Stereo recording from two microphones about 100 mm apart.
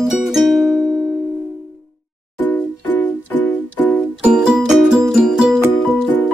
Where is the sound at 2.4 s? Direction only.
15° left (ahead or behind).